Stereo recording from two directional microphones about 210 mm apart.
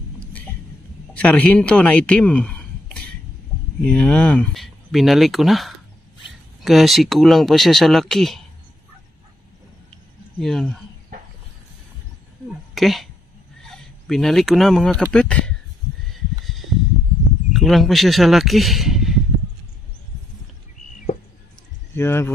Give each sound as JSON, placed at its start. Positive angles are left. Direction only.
{"t": 1.1, "sound": "speech", "side_deg": 5}
{"t": 10.4, "sound": "speech", "side_deg": 0}
{"t": 12.7, "sound": "speech", "side_deg": 0}
{"t": 16.1, "sound": "a sound", "side_deg": 0}
{"t": 17.5, "sound": "speech", "side_deg": 0}
{"t": 21.1, "sound": "a sound", "side_deg": 35}
{"t": 21.9, "sound": "speech", "side_deg": 10}